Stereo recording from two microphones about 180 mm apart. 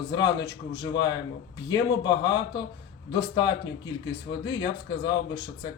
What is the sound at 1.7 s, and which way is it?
Speech, 25° left (ahead or behind).